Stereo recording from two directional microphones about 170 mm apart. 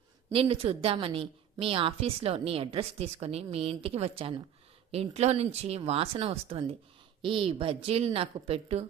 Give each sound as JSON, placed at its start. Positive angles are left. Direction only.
{"t": 0.3, "sound": "a woman's voice", "side_deg": -30}